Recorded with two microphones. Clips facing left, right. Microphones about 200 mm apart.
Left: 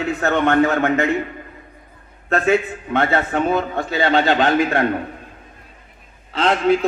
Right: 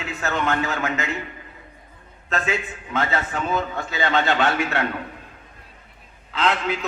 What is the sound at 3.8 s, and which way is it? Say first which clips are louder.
A man's voice: left 6 dB; 35° left (ahead or behind).